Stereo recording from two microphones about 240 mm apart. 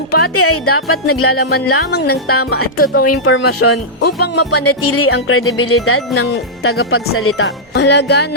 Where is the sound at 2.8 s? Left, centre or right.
Left.